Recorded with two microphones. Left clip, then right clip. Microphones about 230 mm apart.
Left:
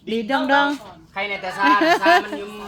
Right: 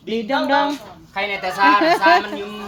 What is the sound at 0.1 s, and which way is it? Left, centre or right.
Speech, centre.